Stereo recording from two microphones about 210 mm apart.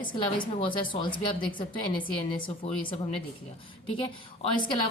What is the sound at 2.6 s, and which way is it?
Speech, 25° left (ahead or behind).